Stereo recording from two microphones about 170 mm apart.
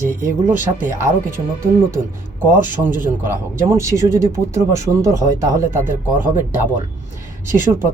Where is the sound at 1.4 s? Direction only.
25° right (ahead or behind).